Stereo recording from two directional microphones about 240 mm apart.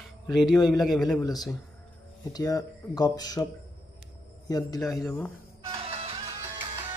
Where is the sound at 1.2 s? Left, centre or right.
Centre.